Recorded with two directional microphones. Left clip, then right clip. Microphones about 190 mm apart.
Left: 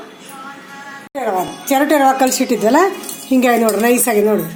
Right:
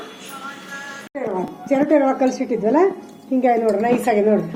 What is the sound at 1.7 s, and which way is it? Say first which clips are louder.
Speech: left 4 dB; 65° left (ahead or behind).